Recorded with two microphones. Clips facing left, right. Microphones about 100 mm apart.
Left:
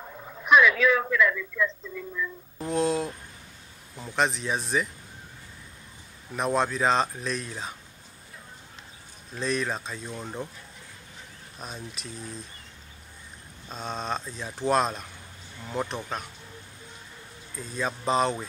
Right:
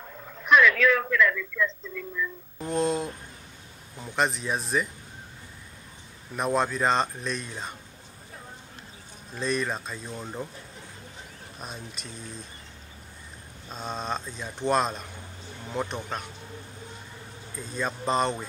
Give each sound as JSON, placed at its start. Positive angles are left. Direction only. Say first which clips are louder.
{"t": 0.0, "sound": "speech", "louder": "left 1 dB", "side_deg": 10}
{"t": 2.6, "sound": "speech", "louder": "left 1 dB", "side_deg": 0}
{"t": 6.3, "sound": "speech", "louder": "even", "side_deg": 0}
{"t": 9.3, "sound": "speech", "louder": "even", "side_deg": 0}
{"t": 11.6, "sound": "speech", "louder": "left 1 dB", "side_deg": 0}
{"t": 13.7, "sound": "speech", "louder": "even", "side_deg": 0}
{"t": 17.6, "sound": "speech", "louder": "even", "side_deg": 0}